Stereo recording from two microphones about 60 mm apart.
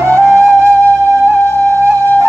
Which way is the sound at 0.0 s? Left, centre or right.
Right.